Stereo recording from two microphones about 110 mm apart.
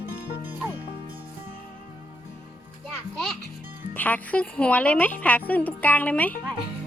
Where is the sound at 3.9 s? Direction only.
15° left (ahead or behind).